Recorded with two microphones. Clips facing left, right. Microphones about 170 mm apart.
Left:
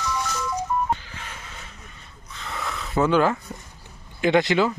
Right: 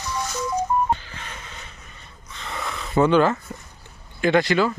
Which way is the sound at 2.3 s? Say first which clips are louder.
Right 1 dB; centre (ahead or behind).